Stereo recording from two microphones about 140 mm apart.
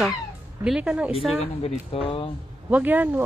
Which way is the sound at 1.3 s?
45° left (ahead or behind).